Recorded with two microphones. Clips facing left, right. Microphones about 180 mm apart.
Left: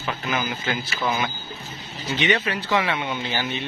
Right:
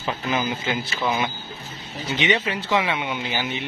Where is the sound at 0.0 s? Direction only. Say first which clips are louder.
Right 2 dB; 25° right (ahead or behind).